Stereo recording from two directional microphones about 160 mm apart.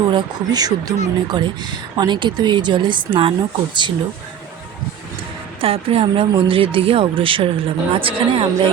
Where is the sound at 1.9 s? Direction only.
30° right (ahead or behind).